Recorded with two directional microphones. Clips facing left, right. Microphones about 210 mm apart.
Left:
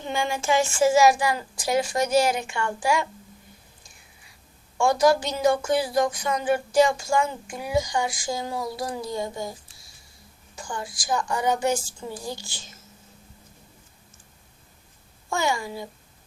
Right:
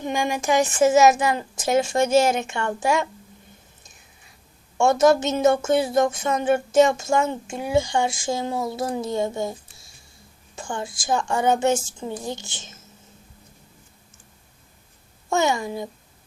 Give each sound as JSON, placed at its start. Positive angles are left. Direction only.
{"t": 0.0, "sound": "speech", "side_deg": -15}
{"t": 4.8, "sound": "speech", "side_deg": -25}
{"t": 15.3, "sound": "speech", "side_deg": -20}